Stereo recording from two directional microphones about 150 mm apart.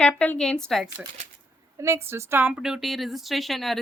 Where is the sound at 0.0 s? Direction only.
10° left (ahead or behind).